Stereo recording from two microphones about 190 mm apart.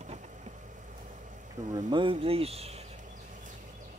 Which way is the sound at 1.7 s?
20° right (ahead or behind).